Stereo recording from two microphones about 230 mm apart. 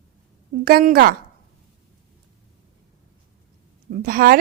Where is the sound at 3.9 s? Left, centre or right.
Right.